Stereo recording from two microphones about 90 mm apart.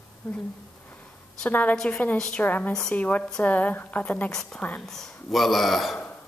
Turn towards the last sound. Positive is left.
turn(degrees=0)  # may be behind; listen again after turning